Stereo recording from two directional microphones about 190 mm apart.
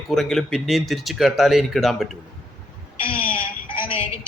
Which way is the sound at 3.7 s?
30° left (ahead or behind).